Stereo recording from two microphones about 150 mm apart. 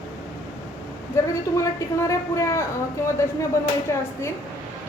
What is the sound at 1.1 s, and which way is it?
Speech, 20° left (ahead or behind).